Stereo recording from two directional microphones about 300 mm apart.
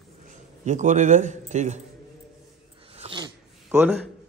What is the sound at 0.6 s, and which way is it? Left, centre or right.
A man's voice, right.